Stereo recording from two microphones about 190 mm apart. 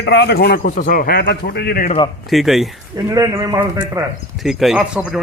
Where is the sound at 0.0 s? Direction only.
65° left (ahead or behind).